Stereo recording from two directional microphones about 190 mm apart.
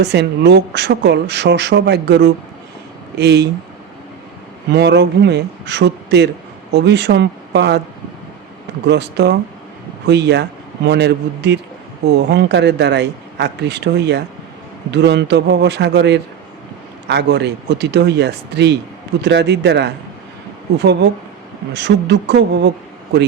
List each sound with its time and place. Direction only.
0.0 s speech: 65° right (ahead or behind)
4.7 s speech: 60° right (ahead or behind)
8.9 s speech: 60° right (ahead or behind)